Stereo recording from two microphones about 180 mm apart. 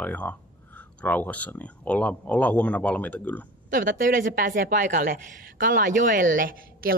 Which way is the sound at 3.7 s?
50° right (ahead or behind).